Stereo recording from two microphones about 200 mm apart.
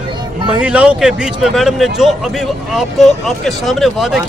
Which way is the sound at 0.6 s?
5° right (ahead or behind).